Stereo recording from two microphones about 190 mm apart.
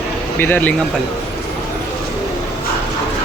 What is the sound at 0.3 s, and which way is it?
Speech, 10° left (ahead or behind).